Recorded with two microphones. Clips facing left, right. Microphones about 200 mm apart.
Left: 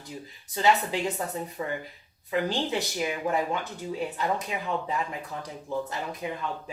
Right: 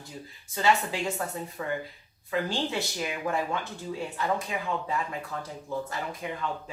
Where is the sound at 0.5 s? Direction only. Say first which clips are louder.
Left 2 dB; 20° left (ahead or behind).